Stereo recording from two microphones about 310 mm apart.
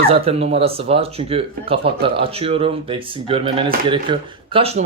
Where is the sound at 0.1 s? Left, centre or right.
Centre.